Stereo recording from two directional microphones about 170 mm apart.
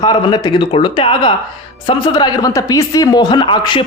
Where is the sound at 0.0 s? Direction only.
25° left (ahead or behind).